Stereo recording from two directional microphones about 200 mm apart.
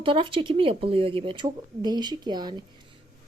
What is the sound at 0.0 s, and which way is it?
Speech, 25° right (ahead or behind).